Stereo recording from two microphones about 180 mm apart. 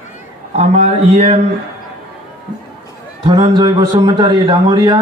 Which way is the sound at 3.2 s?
25° right (ahead or behind).